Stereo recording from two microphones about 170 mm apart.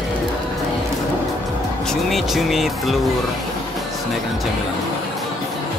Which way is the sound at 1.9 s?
Centre (ahead or behind).